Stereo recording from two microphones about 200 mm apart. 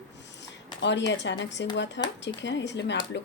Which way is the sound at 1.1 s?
65° left (ahead or behind).